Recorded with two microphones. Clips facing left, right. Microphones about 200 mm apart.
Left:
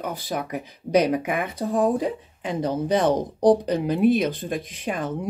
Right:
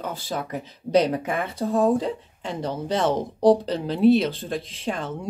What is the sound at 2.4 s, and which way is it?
Speech, 15° left (ahead or behind).